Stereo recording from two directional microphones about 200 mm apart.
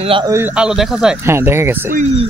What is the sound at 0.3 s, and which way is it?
Speech, 10° right (ahead or behind).